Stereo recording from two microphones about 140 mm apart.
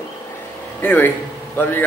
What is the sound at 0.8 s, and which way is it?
A man's voice, 15° left (ahead or behind).